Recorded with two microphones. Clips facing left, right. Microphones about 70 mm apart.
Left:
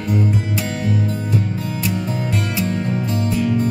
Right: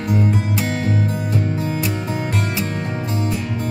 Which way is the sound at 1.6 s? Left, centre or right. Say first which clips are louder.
Right 1 dB; right.